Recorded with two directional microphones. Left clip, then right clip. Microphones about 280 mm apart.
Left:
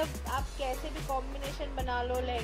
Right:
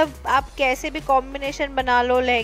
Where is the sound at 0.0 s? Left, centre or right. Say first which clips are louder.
Right 15 dB; right.